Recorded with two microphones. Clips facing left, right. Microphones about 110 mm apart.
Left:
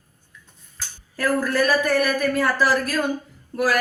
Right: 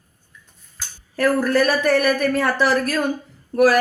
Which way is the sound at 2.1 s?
25° right (ahead or behind).